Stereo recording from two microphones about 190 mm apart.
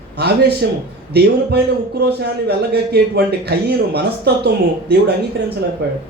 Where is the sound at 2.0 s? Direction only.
55° right (ahead or behind).